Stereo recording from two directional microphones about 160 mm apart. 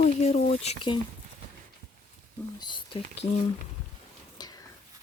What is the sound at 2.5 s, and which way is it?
Speech, 30° left (ahead or behind).